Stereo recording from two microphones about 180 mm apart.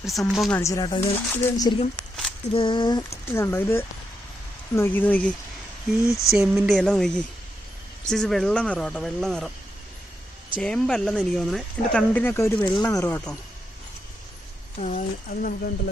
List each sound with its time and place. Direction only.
0.0 s speech: centre (ahead or behind)
0.5 s speech: 15° left (ahead or behind)
0.9 s speech: 30° left (ahead or behind)
2.0 s a sound: centre (ahead or behind)
2.5 s speech: 30° left (ahead or behind)
3.3 s speech: 15° left (ahead or behind)
6.3 s speech: 5° right (ahead or behind)
6.7 s speech: 5° left (ahead or behind)
10.5 s speech: 5° left (ahead or behind)
14.8 s speech: 40° left (ahead or behind)
15.3 s speech: 55° left (ahead or behind)